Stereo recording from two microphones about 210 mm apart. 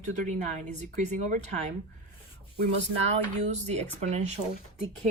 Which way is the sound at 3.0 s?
30° right (ahead or behind).